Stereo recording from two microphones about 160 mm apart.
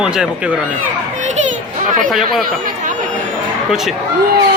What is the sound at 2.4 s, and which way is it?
Chatter, 55° right (ahead or behind).